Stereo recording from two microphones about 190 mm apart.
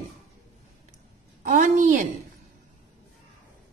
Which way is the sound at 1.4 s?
45° right (ahead or behind).